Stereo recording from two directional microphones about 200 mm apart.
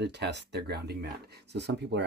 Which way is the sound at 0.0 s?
60° right (ahead or behind).